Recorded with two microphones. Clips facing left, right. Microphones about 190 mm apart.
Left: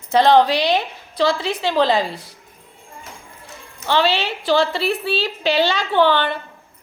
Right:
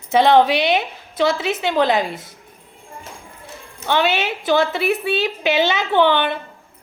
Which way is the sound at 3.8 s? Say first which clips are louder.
Even; 15° right (ahead or behind).